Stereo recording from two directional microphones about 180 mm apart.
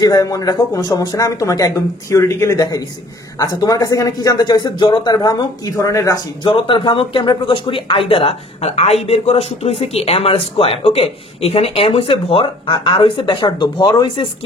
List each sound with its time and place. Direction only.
0.0 s a man's voice: 20° left (ahead or behind)